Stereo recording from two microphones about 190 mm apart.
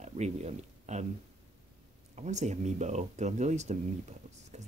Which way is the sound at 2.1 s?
35° right (ahead or behind).